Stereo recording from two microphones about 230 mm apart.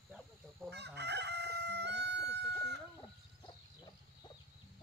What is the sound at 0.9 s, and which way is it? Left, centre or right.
Chicken, right.